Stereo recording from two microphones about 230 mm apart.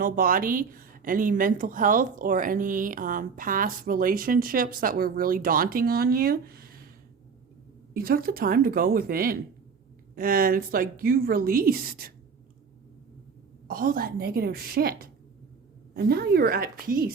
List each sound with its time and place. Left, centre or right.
0.0 s a woman's voice: right
7.9 s a woman's voice: right
13.7 s a woman's voice: right
16.0 s a woman's voice: right